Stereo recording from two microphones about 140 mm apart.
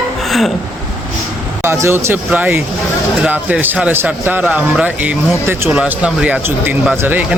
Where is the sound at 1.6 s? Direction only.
20° right (ahead or behind).